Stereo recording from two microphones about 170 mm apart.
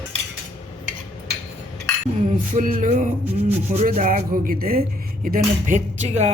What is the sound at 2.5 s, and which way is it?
Speech, 50° right (ahead or behind).